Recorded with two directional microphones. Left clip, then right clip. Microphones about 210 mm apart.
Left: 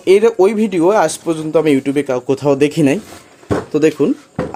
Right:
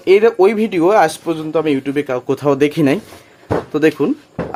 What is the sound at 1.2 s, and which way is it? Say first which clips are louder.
Speech: left 3 dB; 25° left (ahead or behind).